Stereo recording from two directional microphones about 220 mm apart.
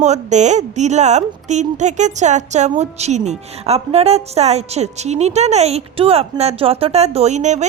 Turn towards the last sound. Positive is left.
turn(degrees=-30)  # may be behind; listen again after turning